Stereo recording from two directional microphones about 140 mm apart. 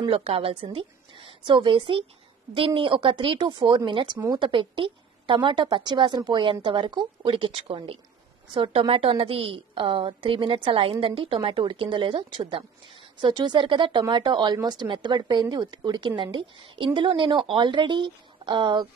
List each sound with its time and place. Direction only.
0.0 s a woman's voice: 40° right (ahead or behind)